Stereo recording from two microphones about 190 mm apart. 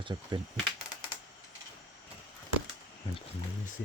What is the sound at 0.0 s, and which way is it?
Speech, 25° right (ahead or behind).